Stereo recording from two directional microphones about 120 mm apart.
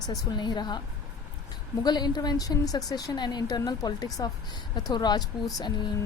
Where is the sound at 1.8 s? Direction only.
35° left (ahead or behind).